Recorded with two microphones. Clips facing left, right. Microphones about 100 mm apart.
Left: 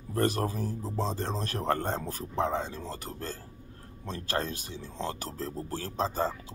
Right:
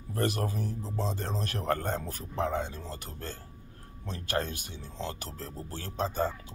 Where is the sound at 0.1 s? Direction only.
35° left (ahead or behind).